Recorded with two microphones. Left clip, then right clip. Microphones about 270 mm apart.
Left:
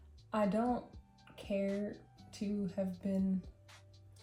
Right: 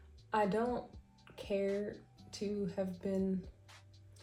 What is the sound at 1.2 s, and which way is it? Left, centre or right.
Music, right.